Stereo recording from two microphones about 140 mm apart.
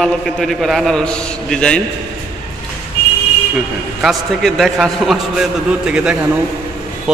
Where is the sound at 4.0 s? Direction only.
Centre (ahead or behind).